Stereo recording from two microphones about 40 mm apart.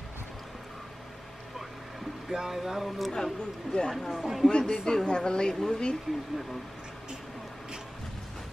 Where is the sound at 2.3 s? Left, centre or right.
Centre.